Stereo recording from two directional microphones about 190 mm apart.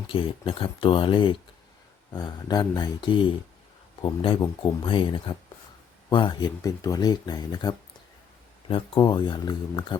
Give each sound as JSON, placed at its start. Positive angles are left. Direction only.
{"t": 0.1, "sound": "speech", "side_deg": 25}